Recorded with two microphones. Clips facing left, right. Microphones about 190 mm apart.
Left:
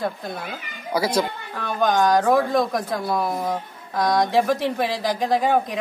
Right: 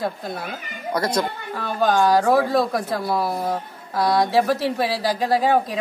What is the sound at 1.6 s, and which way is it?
Speech, 5° right (ahead or behind).